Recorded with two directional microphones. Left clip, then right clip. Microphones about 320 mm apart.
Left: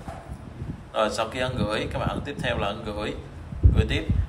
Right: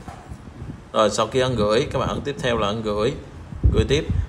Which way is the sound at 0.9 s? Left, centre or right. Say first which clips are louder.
Right 6 dB; centre.